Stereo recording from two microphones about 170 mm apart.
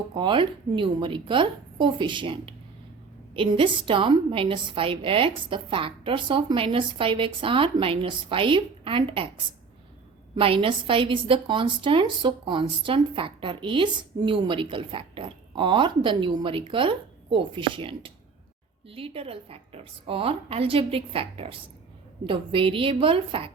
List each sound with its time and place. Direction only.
0.1 s a woman's voice: 30° right (ahead or behind)
10.3 s a woman's voice: 30° right (ahead or behind)